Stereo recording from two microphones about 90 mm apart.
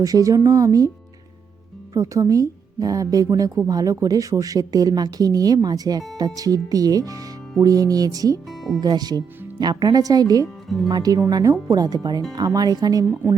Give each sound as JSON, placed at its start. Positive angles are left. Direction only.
{"t": 0.0, "sound": "a woman's voice", "side_deg": -40}
{"t": 1.9, "sound": "a woman's voice", "side_deg": -40}
{"t": 8.4, "sound": "speech", "side_deg": 0}
{"t": 8.8, "sound": "a woman's voice", "side_deg": -50}